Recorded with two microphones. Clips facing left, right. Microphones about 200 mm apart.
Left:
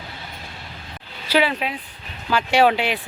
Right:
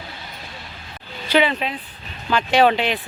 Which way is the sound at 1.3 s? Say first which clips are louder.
Right 1 dB; 5° left (ahead or behind).